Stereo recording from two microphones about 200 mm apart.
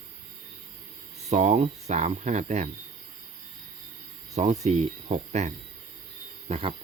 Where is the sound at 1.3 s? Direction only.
35° right (ahead or behind).